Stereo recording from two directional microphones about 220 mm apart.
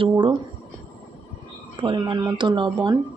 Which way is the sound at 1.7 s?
20° right (ahead or behind).